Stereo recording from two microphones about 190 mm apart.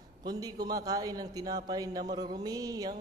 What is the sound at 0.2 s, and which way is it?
Speech, 20° right (ahead or behind).